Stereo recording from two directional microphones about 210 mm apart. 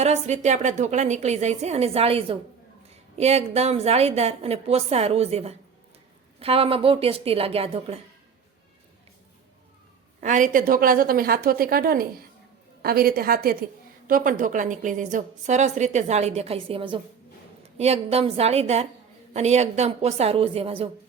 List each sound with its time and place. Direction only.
0.0 s a woman's voice: 35° right (ahead or behind)
10.2 s a woman's voice: 40° right (ahead or behind)